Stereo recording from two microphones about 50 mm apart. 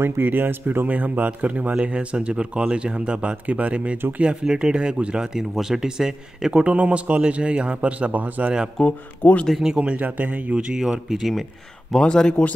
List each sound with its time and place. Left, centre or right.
0.0 s speech: right
8.8 s speech: left
9.8 s speech: right
10.5 s speech: centre
11.9 s speech: centre